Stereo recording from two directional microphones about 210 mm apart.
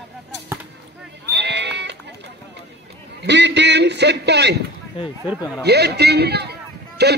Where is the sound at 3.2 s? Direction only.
55° right (ahead or behind).